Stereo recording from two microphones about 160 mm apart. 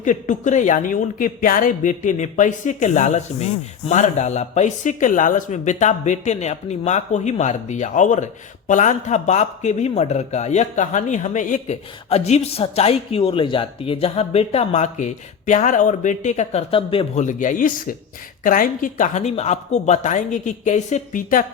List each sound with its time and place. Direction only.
0.0 s speech: 50° left (ahead or behind); by 17.1 s 35° left (ahead or behind)
17.2 s speech: 50° left (ahead or behind)